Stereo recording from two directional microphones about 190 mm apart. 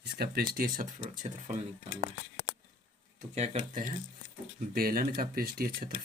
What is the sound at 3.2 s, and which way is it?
Speech, 35° right (ahead or behind).